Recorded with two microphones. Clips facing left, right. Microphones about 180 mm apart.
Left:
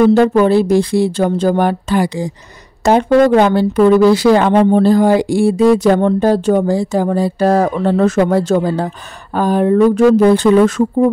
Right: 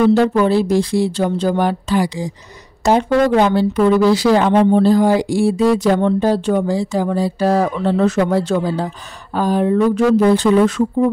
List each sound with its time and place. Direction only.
0.0 s speech: 50° left (ahead or behind)